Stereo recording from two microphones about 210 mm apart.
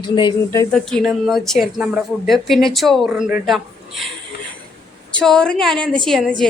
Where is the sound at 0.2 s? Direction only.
20° left (ahead or behind).